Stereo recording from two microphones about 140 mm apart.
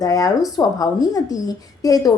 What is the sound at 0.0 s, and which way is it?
A woman's voice, 25° left (ahead or behind).